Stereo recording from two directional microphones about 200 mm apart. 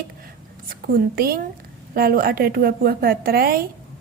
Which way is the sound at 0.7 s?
45° right (ahead or behind).